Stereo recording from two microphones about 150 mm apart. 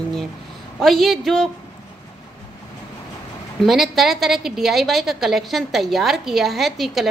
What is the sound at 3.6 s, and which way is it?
A woman's voice, centre (ahead or behind).